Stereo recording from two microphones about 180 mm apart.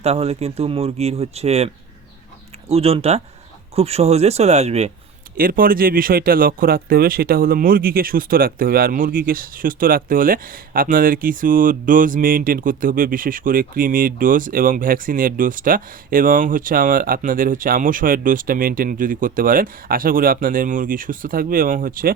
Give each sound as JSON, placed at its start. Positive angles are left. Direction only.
{"t": 0.0, "sound": "speech", "side_deg": -35}
{"t": 5.4, "sound": "speech", "side_deg": -50}